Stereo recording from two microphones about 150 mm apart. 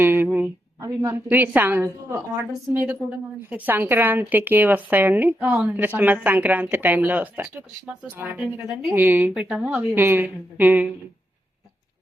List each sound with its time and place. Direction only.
0.0 s a sound: 15° right (ahead or behind)
0.8 s a woman's voice: 15° right (ahead or behind)
9.0 s a woman's voice: 15° right (ahead or behind)